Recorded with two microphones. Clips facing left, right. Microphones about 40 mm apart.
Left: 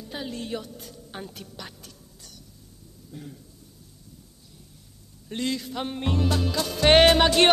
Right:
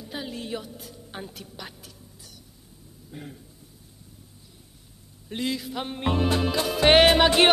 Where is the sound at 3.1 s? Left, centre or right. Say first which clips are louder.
Right 1 dB; right.